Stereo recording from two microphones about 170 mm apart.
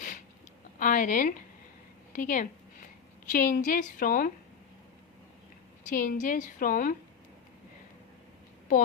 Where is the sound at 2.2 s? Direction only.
50° left (ahead or behind).